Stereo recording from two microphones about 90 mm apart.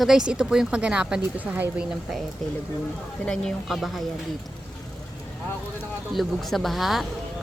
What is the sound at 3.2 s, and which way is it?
Speech, 5° left (ahead or behind).